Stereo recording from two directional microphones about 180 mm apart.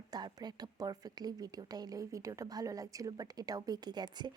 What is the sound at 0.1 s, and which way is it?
Speech, 20° right (ahead or behind).